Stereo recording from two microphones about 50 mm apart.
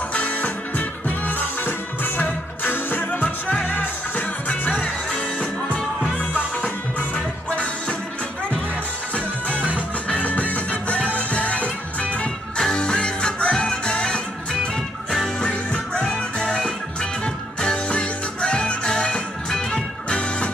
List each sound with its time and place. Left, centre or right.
0.1 s music: left
5.1 s music: left
9.1 s music: left
12.5 s music: centre